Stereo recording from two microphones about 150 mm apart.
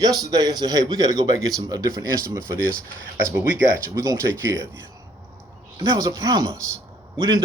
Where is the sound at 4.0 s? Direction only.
20° right (ahead or behind).